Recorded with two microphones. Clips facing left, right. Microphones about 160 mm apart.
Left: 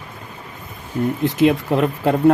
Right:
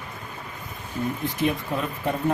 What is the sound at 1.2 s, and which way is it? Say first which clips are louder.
Speech: left 11 dB; 80° left.